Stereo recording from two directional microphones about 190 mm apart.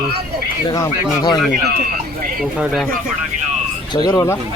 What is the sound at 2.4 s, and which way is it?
Speech, centre (ahead or behind).